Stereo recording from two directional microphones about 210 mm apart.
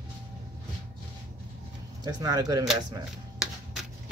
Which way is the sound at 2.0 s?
15° right (ahead or behind).